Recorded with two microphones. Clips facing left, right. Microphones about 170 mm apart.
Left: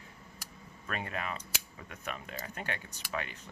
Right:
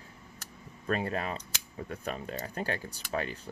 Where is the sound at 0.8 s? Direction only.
35° right (ahead or behind).